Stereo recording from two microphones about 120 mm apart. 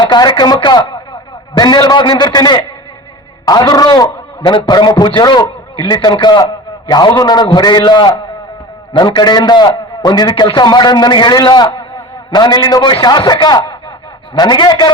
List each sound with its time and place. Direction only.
0.0 s a man's voice: 40° left (ahead or behind)